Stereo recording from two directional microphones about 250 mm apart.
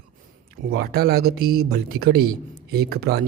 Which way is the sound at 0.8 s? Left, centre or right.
Right.